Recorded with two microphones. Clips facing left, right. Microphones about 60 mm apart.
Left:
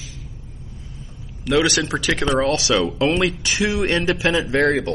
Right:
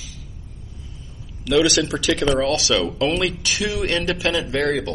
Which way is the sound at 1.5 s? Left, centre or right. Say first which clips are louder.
Right 1 dB; left.